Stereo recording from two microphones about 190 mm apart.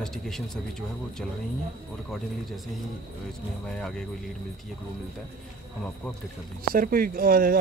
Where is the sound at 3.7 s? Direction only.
5° left (ahead or behind).